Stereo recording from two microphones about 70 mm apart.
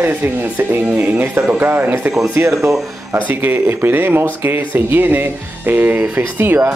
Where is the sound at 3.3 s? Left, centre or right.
Right.